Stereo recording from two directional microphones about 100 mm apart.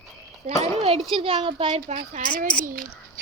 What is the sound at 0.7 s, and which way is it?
A child's voice, 65° right (ahead or behind).